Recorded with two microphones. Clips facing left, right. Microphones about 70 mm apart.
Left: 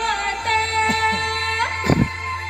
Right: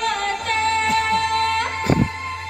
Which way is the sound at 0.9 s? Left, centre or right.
Left.